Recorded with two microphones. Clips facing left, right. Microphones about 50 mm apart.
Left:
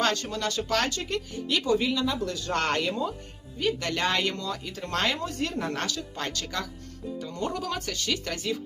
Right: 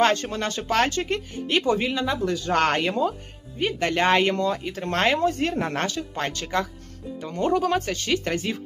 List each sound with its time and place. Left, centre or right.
0.0 s speech: right